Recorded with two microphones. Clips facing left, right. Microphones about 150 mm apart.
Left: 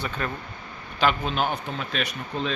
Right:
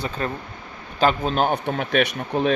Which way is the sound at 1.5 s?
60° right (ahead or behind).